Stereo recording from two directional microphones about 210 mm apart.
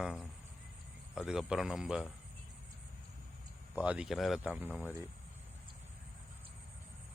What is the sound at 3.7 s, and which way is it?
Speech, 5° right (ahead or behind).